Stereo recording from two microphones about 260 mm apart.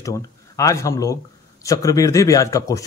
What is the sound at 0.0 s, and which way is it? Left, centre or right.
Speech, centre.